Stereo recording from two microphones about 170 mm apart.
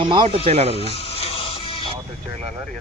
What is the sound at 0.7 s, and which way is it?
Music, 35° left (ahead or behind).